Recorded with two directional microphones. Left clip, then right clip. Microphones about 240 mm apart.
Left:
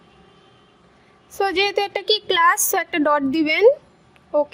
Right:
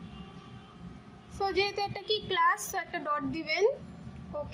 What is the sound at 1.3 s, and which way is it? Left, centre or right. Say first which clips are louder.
A woman's voice: left 10 dB; left.